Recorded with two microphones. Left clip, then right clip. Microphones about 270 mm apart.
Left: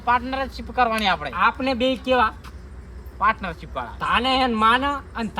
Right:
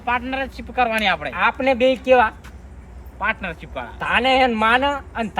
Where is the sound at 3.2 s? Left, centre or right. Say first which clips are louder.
Left 2 dB; left.